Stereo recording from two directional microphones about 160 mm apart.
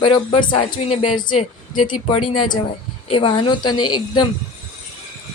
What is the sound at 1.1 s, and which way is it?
Speech, 55° left (ahead or behind).